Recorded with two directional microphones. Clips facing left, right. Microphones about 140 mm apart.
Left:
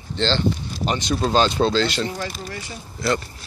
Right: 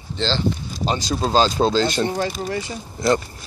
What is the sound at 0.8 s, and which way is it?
Speech, 35° right (ahead or behind).